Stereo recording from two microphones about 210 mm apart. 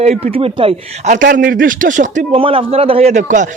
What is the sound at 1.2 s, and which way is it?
A man's voice, 40° right (ahead or behind).